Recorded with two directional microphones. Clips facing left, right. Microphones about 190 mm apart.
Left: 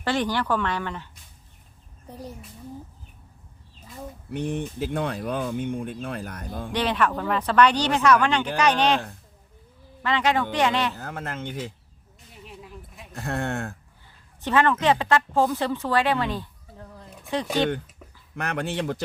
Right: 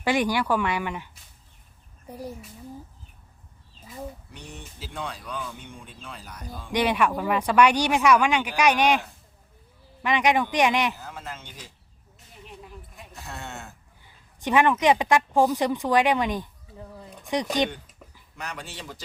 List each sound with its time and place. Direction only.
0.0 s speech: 10° right (ahead or behind)
4.3 s speech: 55° left (ahead or behind)
6.7 s speech: 10° right (ahead or behind)
10.0 s speech: 15° right (ahead or behind)
10.9 s speech: 60° left (ahead or behind)
12.5 s a sound: centre (ahead or behind)
13.1 s speech: 55° left (ahead or behind)
14.4 s speech: 15° right (ahead or behind)
16.7 s a sound: centre (ahead or behind)
17.2 s speech: 15° right (ahead or behind)
18.3 s speech: 60° left (ahead or behind)